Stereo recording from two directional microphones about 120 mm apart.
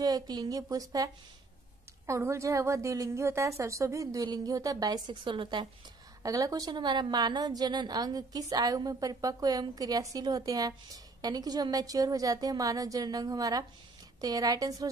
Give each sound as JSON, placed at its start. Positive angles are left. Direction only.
{"t": 0.0, "sound": "a woman's voice", "side_deg": -35}
{"t": 6.2, "sound": "a woman's voice", "side_deg": -30}